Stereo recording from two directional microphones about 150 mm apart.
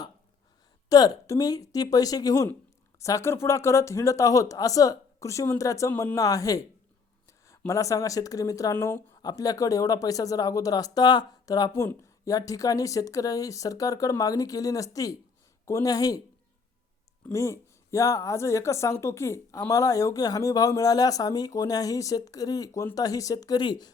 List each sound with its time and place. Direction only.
0.9 s speech: 25° left (ahead or behind)
7.3 s a sound: 20° left (ahead or behind)
7.7 s speech: 20° left (ahead or behind)
17.3 s speech: 20° left (ahead or behind)